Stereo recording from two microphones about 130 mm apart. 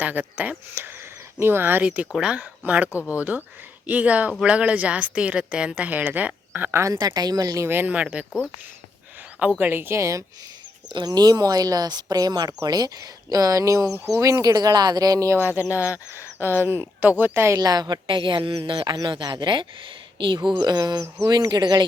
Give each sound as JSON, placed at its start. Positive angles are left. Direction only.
{"t": 0.0, "sound": "speech", "side_deg": -15}
{"t": 9.6, "sound": "speech", "side_deg": -15}